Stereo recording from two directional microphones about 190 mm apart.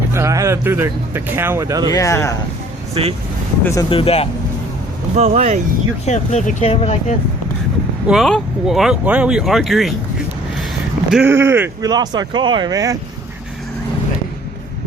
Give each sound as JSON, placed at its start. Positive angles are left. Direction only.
{"t": 0.1, "sound": "speech", "side_deg": -15}
{"t": 1.9, "sound": "speech", "side_deg": 15}
{"t": 2.9, "sound": "speech", "side_deg": -30}
{"t": 3.6, "sound": "speech", "side_deg": 15}
{"t": 3.8, "sound": "speech", "side_deg": 30}
{"t": 5.1, "sound": "speech", "side_deg": -35}
{"t": 6.1, "sound": "speech", "side_deg": 40}
{"t": 8.0, "sound": "speech", "side_deg": 0}
{"t": 11.1, "sound": "speech", "side_deg": -10}